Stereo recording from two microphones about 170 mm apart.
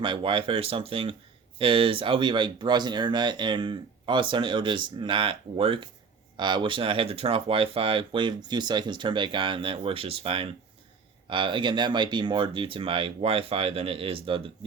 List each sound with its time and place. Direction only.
0.0 s speech: 30° right (ahead or behind)